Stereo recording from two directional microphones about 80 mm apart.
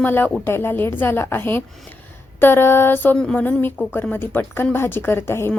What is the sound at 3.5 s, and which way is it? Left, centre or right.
A woman's voice, left.